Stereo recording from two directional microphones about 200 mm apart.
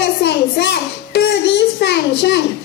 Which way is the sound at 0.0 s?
60° left (ahead or behind).